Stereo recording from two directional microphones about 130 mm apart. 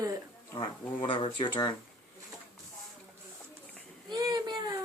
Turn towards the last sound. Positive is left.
turn(degrees=-35)  # may be behind; listen again after turning